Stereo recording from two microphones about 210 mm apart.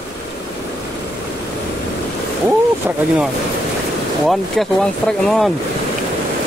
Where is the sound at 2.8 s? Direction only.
10° right (ahead or behind).